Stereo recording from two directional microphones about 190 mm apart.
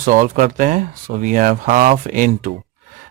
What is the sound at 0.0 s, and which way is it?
Speech, 45° right (ahead or behind).